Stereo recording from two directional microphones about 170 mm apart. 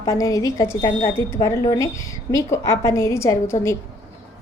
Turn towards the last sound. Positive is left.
turn(degrees=15)  # may be behind; listen again after turning